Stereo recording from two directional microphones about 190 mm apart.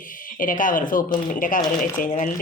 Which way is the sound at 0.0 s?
45° left (ahead or behind).